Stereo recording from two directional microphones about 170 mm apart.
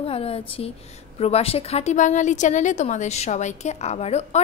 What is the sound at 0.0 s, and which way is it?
A woman's voice, 35° left (ahead or behind).